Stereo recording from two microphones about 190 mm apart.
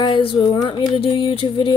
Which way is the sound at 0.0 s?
25° left (ahead or behind).